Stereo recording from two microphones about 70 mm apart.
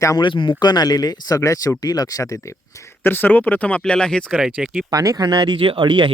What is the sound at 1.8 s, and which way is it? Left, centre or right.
Speech, left.